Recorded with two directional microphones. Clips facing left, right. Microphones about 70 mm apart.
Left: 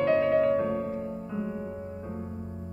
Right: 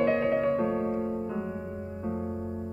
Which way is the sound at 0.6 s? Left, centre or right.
Right.